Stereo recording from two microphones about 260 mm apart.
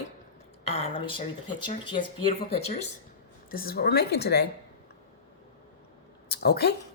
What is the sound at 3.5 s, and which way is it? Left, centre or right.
Speech, left.